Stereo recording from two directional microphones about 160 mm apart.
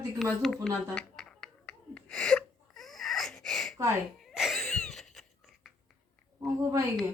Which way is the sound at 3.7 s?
20° right (ahead or behind).